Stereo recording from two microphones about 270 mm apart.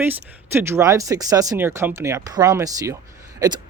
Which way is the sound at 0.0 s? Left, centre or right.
Centre.